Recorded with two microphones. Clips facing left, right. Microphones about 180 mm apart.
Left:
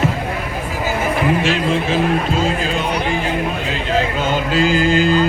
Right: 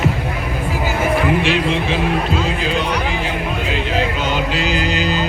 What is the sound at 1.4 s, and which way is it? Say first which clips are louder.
Speech: even; 45° left (ahead or behind).